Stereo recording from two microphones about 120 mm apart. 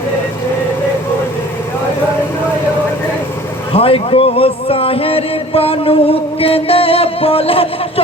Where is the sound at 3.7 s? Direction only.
50° left (ahead or behind).